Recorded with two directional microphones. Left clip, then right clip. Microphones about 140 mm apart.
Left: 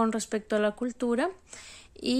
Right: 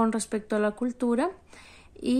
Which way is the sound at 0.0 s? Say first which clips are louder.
Right 1 dB; 20° left (ahead or behind).